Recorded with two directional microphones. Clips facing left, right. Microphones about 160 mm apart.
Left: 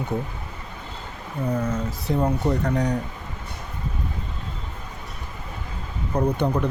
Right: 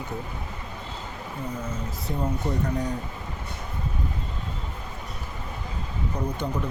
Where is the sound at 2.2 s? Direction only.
80° left.